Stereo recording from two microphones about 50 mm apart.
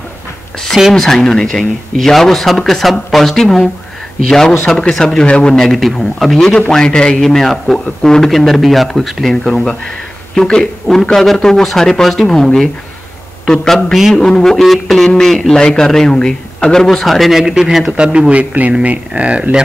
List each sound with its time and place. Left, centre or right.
0.9 s a man's voice: centre
6.7 s a man's voice: centre
7.2 s a man's voice: centre
14.1 s a man's voice: centre
17.4 s speech: centre
18.3 s speech: right